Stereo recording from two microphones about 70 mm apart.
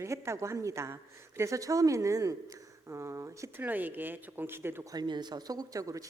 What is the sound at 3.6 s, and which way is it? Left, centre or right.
Speech, right.